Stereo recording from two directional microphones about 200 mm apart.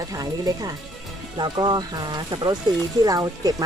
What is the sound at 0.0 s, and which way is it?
Speech, 20° right (ahead or behind).